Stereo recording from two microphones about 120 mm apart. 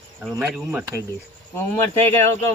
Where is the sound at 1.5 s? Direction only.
20° left (ahead or behind).